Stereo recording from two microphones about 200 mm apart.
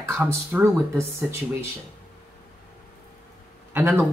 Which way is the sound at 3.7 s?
10° right (ahead or behind).